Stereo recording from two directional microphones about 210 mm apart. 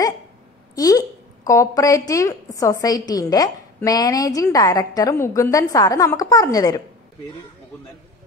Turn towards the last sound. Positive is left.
turn(degrees=15)  # may be behind; listen again after turning